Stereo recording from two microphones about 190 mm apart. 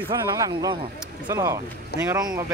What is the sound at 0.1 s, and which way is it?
Speech, 20° right (ahead or behind).